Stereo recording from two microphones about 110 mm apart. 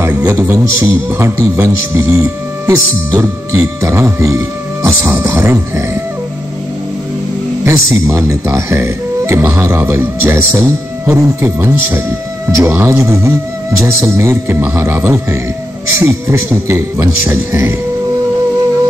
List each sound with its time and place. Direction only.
0.2 s speech: 30° right (ahead or behind)
7.6 s speech: 25° right (ahead or behind)